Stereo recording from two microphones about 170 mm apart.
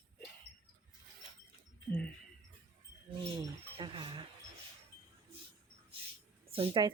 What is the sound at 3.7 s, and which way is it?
Speech, 30° right (ahead or behind).